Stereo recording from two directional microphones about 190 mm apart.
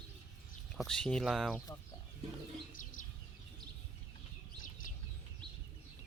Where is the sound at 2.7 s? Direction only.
45° left (ahead or behind).